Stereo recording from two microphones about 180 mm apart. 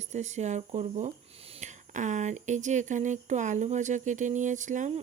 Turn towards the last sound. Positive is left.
turn(degrees=-45)  # may be behind; listen again after turning